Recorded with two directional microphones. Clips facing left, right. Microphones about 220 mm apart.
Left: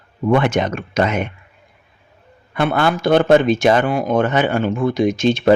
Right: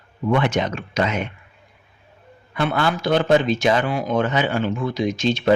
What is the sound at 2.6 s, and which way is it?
Speech, 55° left (ahead or behind).